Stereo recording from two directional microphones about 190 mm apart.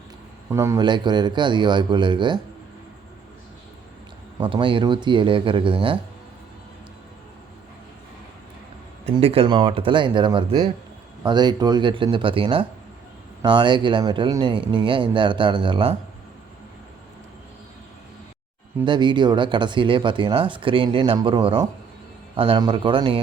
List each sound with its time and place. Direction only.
0.5 s speech: 15° right (ahead or behind)
4.4 s speech: 25° right (ahead or behind)
9.1 s speech: 30° right (ahead or behind)
18.9 s speech: 25° right (ahead or behind)